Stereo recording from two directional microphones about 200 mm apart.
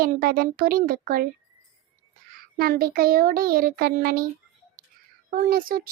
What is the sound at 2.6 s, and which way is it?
Child singing, 50° right (ahead or behind).